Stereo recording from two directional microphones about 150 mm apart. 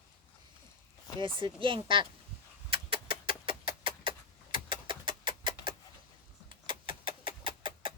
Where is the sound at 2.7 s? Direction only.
40° right (ahead or behind).